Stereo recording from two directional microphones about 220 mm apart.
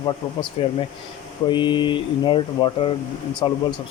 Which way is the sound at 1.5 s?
20° left (ahead or behind).